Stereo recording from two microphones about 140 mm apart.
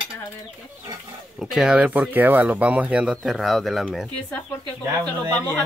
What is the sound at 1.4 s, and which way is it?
Speech, 5° right (ahead or behind).